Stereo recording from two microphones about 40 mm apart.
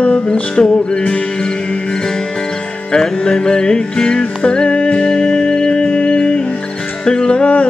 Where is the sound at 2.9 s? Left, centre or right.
Centre.